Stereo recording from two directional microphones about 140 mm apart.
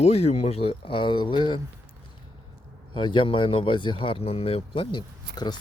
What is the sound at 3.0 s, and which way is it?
Speech, 35° left (ahead or behind).